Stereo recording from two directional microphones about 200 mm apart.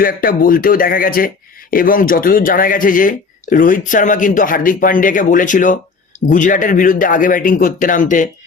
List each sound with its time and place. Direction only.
0.0 s speech: 45° left (ahead or behind)